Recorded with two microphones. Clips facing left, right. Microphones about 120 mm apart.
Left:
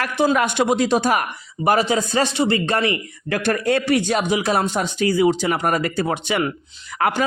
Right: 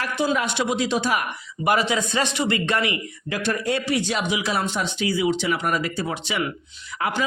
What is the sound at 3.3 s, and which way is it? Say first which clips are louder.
Speech: left 5 dB; 55° left (ahead or behind).